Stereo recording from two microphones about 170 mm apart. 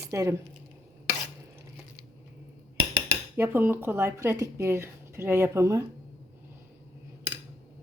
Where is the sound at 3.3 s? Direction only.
10° right (ahead or behind).